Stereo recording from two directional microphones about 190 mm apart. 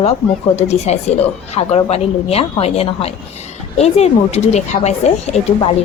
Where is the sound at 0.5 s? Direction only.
35° left (ahead or behind).